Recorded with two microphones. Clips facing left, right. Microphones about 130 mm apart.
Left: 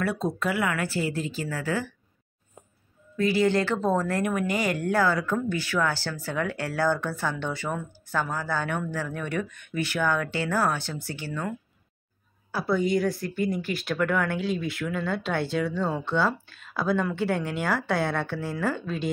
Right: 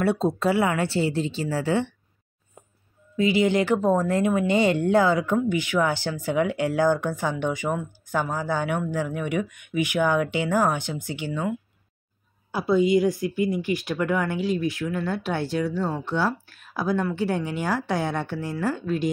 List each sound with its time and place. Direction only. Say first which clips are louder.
0.0 s a woman's voice: right 5 dB; 30° right (ahead or behind)
3.2 s speech: right 2 dB; 20° right (ahead or behind)